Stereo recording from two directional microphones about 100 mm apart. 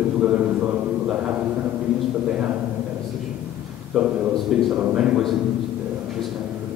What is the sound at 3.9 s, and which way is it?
A man's voice, centre (ahead or behind).